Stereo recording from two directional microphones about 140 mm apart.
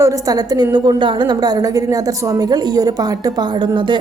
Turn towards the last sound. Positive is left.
turn(degrees=-35)  # may be behind; listen again after turning